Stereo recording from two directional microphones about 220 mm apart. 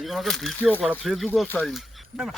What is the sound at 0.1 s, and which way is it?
Speech, centre (ahead or behind).